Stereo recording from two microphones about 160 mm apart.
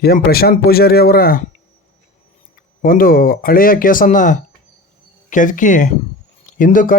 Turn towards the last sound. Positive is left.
turn(degrees=55)  # may be behind; listen again after turning